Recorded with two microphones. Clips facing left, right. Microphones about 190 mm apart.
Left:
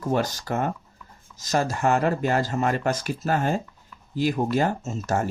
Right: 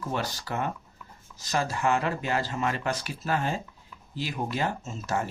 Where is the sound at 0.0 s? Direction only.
45° left (ahead or behind).